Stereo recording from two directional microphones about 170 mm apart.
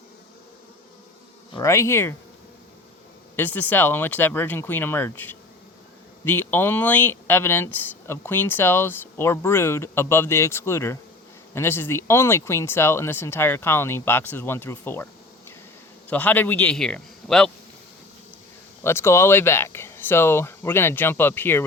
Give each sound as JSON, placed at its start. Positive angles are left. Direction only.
{"t": 1.5, "sound": "speech", "side_deg": 15}
{"t": 3.3, "sound": "speech", "side_deg": 10}
{"t": 16.0, "sound": "speech", "side_deg": 10}
{"t": 18.8, "sound": "speech", "side_deg": 15}